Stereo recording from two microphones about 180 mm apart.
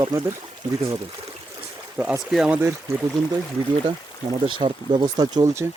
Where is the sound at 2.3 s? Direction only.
5° right (ahead or behind).